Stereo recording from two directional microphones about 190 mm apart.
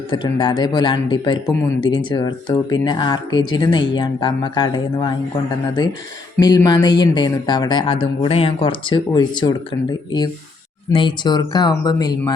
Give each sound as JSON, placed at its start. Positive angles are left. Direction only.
{"t": 0.1, "sound": "speech", "side_deg": 25}
{"t": 6.4, "sound": "speech", "side_deg": 20}
{"t": 10.9, "sound": "speech", "side_deg": 25}